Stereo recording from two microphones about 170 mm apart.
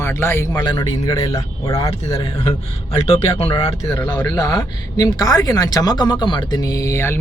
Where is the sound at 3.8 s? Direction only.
15° left (ahead or behind).